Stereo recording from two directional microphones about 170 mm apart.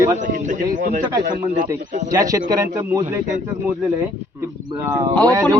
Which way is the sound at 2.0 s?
20° right (ahead or behind).